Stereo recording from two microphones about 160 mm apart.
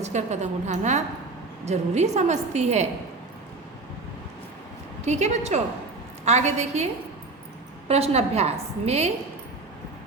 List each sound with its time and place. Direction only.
0.0 s a woman's voice: 45° right (ahead or behind)
5.0 s a woman's voice: 45° right (ahead or behind)
7.9 s a woman's voice: 40° right (ahead or behind)